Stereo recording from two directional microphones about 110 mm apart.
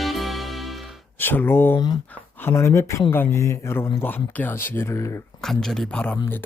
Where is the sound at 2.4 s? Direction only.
25° left (ahead or behind).